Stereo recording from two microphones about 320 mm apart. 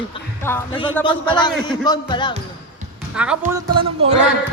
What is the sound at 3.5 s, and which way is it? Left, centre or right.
Speech, centre.